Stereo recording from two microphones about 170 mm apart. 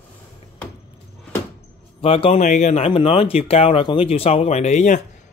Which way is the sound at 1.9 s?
35° left (ahead or behind).